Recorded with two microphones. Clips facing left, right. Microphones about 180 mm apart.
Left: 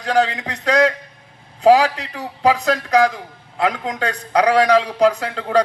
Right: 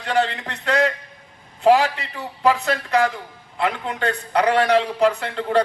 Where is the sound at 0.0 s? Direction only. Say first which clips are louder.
Left 3 dB; 40° left (ahead or behind).